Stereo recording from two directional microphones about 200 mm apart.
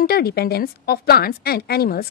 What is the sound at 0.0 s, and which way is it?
A woman's voice, 50° left (ahead or behind).